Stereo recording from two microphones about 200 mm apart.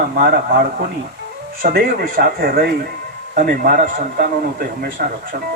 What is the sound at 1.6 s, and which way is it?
A man's voice, 50° right (ahead or behind).